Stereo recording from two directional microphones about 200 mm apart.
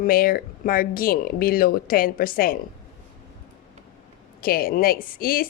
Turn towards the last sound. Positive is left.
turn(degrees=45)  # may be behind; listen again after turning